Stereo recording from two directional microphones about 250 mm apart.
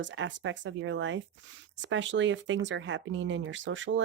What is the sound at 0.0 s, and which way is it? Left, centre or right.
Speech, right.